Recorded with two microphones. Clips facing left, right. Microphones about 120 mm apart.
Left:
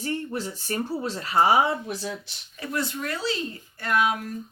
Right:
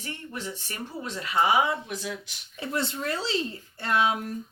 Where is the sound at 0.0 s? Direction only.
35° left (ahead or behind).